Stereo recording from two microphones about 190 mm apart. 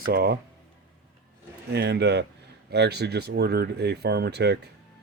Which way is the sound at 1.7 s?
60° right (ahead or behind).